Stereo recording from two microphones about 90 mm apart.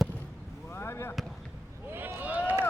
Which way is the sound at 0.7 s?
30° left (ahead or behind).